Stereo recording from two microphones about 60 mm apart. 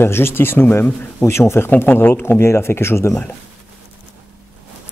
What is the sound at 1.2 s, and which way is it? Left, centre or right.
Speech, left.